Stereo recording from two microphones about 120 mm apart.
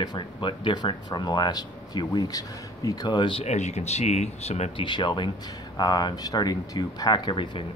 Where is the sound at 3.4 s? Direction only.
70° left (ahead or behind).